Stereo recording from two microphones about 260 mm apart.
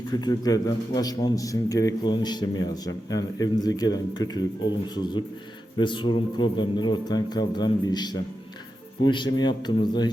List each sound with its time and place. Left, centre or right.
0.1 s a man's voice: centre
5.7 s a man's voice: centre